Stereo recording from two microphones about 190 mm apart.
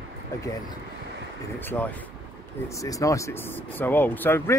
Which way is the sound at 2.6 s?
15° left (ahead or behind).